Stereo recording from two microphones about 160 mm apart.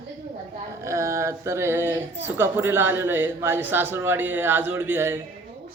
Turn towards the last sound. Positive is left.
turn(degrees=-15)  # may be behind; listen again after turning